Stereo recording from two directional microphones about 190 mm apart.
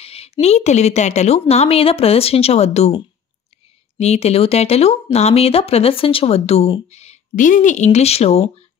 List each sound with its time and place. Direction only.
0.0 s speech: 30° left (ahead or behind)
4.0 s speech: 35° left (ahead or behind)